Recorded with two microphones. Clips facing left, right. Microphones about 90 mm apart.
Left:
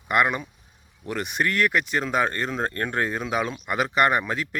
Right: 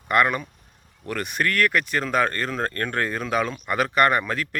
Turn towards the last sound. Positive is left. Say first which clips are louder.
# right 1 dB
turn(degrees=20)  # may be behind; listen again after turning